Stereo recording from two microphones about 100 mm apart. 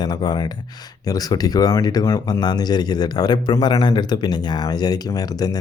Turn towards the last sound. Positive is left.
turn(degrees=40)  # may be behind; listen again after turning